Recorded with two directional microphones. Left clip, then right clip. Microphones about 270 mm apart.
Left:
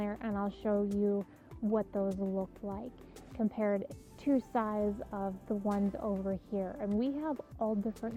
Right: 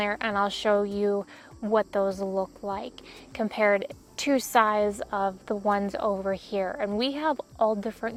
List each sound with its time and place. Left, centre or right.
0.0 s a woman's voice: centre
2.0 s speech: right
3.3 s a woman's voice: centre
6.0 s speech: right
6.3 s a woman's voice: centre